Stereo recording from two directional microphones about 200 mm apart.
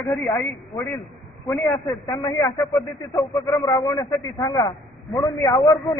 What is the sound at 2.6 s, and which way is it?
Speech, centre (ahead or behind).